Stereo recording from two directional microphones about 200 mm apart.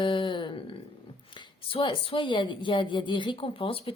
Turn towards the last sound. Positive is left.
turn(degrees=25)  # may be behind; listen again after turning